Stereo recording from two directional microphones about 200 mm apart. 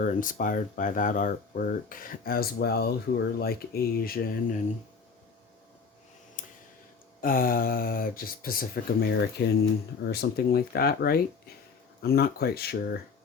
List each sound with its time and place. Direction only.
0.0 s speech: 40° left (ahead or behind)
6.4 s a sound: 40° left (ahead or behind)
7.2 s speech: 45° left (ahead or behind)